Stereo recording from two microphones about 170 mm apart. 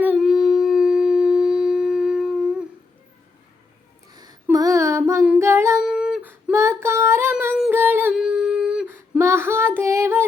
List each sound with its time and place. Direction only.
0.0 s a sound: 5° right (ahead or behind)
4.1 s a sound: 25° right (ahead or behind)
4.5 s female singing: 20° right (ahead or behind)
5.2 s humming: 10° right (ahead or behind)
6.5 s female singing: 15° right (ahead or behind)
7.7 s music: 10° right (ahead or behind)